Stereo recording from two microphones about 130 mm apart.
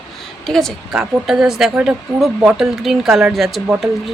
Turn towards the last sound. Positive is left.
turn(degrees=0)  # may be behind; listen again after turning